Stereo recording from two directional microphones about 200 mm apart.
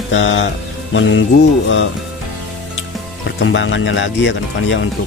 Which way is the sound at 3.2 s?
65° left (ahead or behind).